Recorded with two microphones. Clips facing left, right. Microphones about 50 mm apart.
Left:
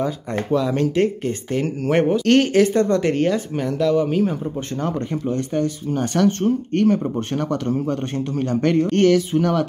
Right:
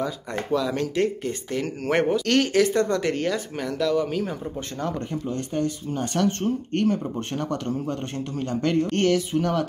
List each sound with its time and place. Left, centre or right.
0.5 s speech: left
2.2 s speech: left
5.3 s speech: left
6.8 s speech: left